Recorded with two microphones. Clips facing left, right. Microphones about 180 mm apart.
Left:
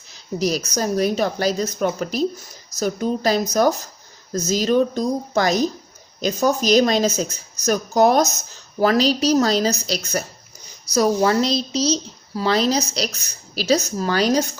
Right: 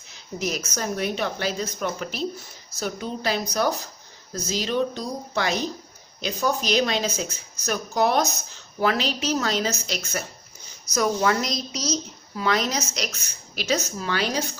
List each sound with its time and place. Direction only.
0.3 s a woman's voice: 35° left (ahead or behind)